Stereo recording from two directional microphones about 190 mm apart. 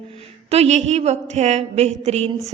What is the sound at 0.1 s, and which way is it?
A woman's voice, 30° right (ahead or behind).